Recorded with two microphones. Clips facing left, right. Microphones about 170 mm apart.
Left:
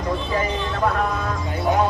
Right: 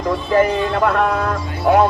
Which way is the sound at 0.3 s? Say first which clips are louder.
Right 12 dB; 60° right (ahead or behind).